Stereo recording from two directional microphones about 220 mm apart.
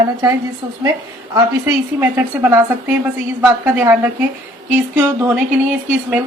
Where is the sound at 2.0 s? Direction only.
10° right (ahead or behind).